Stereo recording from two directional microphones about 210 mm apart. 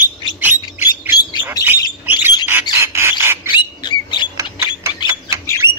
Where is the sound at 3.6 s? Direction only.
20° left (ahead or behind).